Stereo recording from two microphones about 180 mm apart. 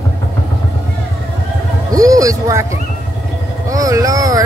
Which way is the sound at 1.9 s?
20° right (ahead or behind).